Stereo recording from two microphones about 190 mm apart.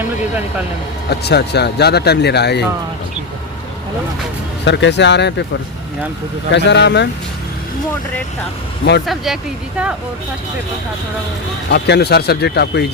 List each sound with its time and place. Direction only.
1.1 s speech: 60° left (ahead or behind)
4.6 s speech: 65° left (ahead or behind)
6.5 s speech: 65° left (ahead or behind)
9.0 s speech: centre (ahead or behind)
11.7 s speech: 60° left (ahead or behind)